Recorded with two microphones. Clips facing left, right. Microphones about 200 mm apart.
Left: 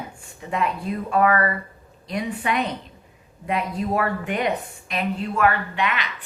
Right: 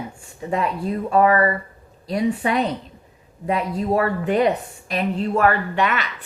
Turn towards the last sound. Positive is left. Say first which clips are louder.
# right 4 dB
turn(degrees=-45)  # may be behind; listen again after turning